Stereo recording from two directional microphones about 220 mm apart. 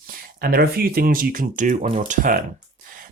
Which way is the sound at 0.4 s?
45° right (ahead or behind).